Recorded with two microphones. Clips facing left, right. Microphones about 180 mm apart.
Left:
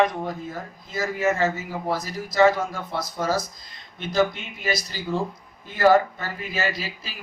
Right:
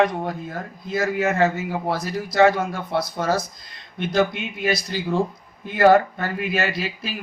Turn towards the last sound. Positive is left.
turn(degrees=-60)  # may be behind; listen again after turning